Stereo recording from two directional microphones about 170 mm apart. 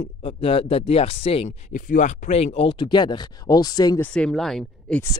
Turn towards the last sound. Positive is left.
turn(degrees=5)  # may be behind; listen again after turning